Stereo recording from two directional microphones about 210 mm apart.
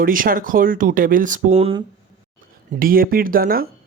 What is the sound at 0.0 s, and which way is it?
Speech, 40° right (ahead or behind).